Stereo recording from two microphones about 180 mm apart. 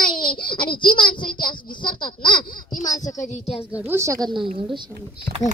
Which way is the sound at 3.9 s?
15° right (ahead or behind).